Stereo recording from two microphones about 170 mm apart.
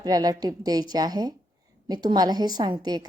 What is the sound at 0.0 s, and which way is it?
A woman's voice, 20° right (ahead or behind).